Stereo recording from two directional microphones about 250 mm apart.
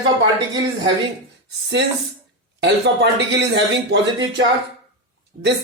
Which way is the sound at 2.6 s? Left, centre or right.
Right.